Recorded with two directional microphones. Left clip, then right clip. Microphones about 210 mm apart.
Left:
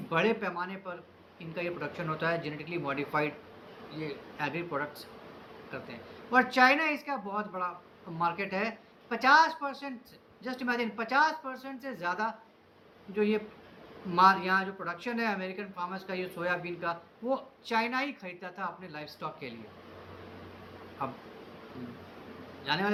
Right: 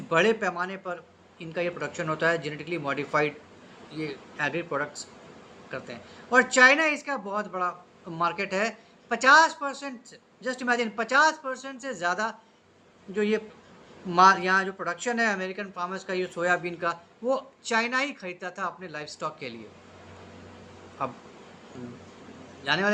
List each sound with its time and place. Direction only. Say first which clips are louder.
0.1 s speech: right 6 dB; 15° right (ahead or behind)
21.0 s speech: right 5 dB; 15° right (ahead or behind)
22.6 s a man's voice: right 5 dB; 15° right (ahead or behind)